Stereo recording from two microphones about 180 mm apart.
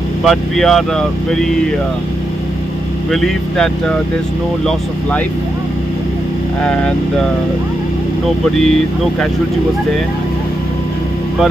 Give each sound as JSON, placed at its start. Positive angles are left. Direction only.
{"t": 0.2, "sound": "speech", "side_deg": 0}
{"t": 3.1, "sound": "speech", "side_deg": 0}